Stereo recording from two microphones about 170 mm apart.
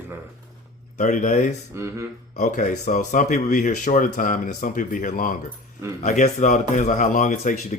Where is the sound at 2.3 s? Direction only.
45° left (ahead or behind).